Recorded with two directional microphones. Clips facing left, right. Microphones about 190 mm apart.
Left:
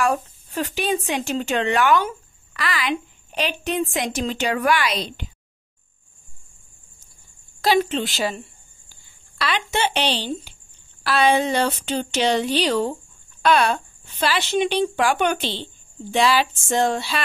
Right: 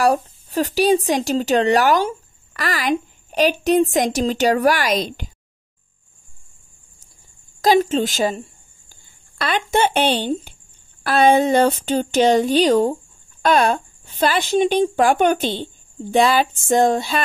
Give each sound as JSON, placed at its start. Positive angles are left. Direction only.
{"t": 0.0, "sound": "speech", "side_deg": -35}
{"t": 7.6, "sound": "speech", "side_deg": -40}